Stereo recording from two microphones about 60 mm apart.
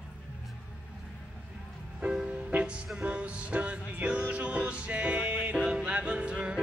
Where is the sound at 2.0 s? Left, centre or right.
Centre.